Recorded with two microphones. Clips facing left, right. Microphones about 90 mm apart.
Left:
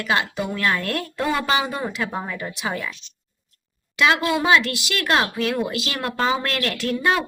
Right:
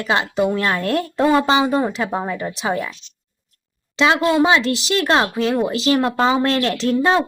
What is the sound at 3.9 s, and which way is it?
Speech, 25° right (ahead or behind).